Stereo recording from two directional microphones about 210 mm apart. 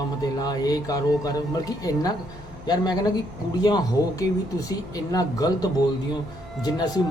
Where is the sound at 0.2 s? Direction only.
15° left (ahead or behind).